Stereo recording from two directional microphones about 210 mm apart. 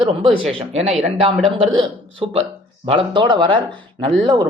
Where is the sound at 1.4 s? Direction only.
25° right (ahead or behind).